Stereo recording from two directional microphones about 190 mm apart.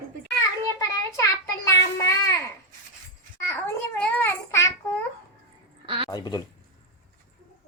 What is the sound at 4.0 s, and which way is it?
Babbling, 10° left (ahead or behind).